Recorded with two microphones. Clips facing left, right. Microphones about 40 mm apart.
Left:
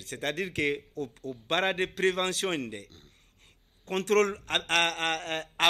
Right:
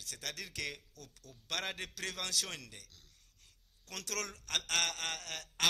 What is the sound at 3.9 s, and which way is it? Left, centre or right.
Speech, left.